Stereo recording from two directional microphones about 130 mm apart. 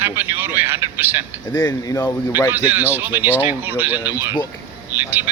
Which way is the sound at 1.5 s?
25° left (ahead or behind).